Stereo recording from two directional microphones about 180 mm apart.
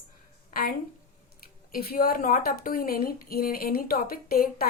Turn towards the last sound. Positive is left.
turn(degrees=55)  # may be behind; listen again after turning